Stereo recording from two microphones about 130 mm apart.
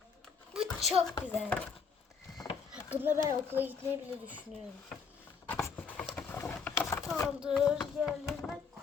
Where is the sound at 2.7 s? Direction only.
10° right (ahead or behind).